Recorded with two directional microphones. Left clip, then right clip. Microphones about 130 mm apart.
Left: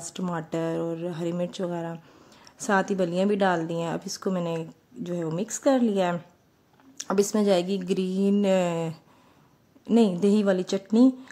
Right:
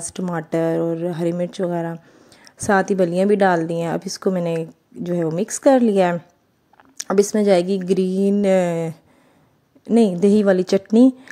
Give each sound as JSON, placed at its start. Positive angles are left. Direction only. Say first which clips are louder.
{"t": 0.0, "sound": "a woman's voice", "louder": "right 6 dB", "side_deg": -40}